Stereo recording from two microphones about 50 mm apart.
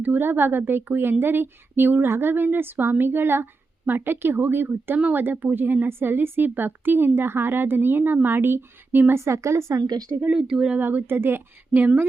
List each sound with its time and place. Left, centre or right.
0.0 s a woman's voice: right
2.0 s speech: right
2.3 s a woman's voice: right
9.1 s a woman's voice: right
10.2 s speech: centre
10.8 s a woman's voice: right